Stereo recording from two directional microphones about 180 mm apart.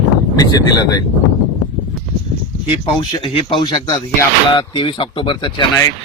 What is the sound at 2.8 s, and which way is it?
Speech, 30° left (ahead or behind).